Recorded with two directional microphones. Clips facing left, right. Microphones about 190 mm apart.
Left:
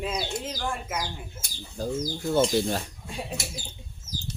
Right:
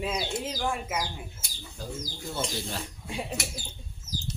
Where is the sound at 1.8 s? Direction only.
45° left (ahead or behind).